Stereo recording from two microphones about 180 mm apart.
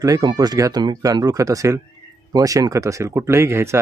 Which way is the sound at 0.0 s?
20° right (ahead or behind).